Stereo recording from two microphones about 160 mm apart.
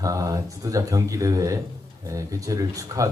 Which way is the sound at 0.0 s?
20° right (ahead or behind).